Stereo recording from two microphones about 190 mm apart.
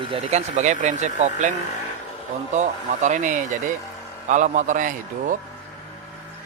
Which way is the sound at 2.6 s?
40° right (ahead or behind).